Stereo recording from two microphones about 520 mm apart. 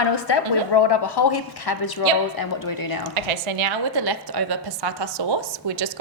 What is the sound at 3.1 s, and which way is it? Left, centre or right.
Speech, right.